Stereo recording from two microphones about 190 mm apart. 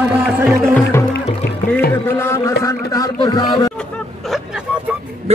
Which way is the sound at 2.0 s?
15° left (ahead or behind).